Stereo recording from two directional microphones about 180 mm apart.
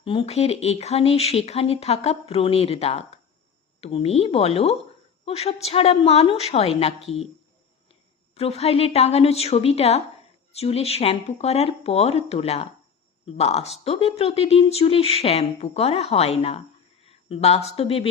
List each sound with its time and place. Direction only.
0.0 s speech: 30° left (ahead or behind)
8.4 s speech: 35° left (ahead or behind)